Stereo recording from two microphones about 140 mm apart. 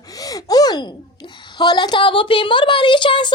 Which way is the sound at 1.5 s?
30° left (ahead or behind).